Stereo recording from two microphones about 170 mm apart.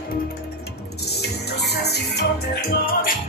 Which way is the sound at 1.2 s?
75° left (ahead or behind).